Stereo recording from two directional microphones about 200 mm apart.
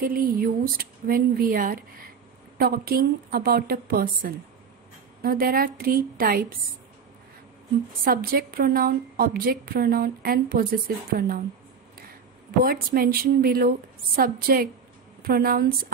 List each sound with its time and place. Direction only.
0.0 s a woman's voice: 45° right (ahead or behind)
8.0 s a woman's voice: 45° right (ahead or behind)
12.4 s a woman's voice: 50° right (ahead or behind)